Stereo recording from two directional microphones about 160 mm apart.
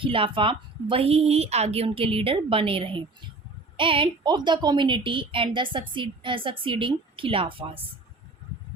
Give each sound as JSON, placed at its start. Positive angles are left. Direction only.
{"t": 0.0, "sound": "a woman's voice", "side_deg": -35}